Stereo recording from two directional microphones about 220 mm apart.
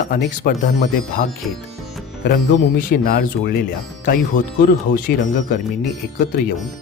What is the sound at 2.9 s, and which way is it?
Speech, 45° left (ahead or behind).